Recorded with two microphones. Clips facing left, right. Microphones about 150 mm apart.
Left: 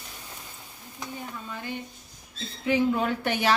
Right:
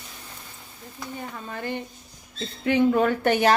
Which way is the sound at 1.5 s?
60° right (ahead or behind).